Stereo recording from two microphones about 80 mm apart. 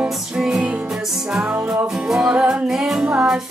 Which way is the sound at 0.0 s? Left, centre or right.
Centre.